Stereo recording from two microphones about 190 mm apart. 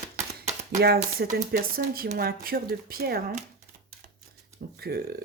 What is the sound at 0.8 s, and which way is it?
Speech, 55° right (ahead or behind).